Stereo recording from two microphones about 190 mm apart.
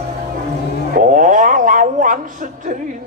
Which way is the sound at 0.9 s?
45° right (ahead or behind).